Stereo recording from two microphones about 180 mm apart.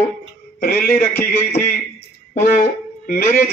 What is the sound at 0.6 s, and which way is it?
Speech, 55° left (ahead or behind).